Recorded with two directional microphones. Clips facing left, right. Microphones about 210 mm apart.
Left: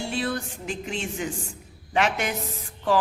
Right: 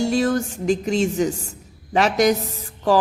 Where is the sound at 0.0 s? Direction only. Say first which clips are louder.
Right 9 dB; 45° right (ahead or behind).